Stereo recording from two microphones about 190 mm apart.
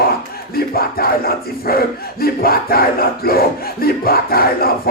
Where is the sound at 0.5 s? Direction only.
50° left (ahead or behind).